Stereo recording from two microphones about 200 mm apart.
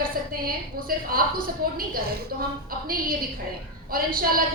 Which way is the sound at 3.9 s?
45° right (ahead or behind).